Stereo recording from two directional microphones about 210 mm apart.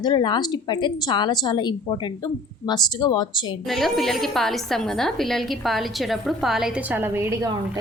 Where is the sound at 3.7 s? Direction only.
Centre (ahead or behind).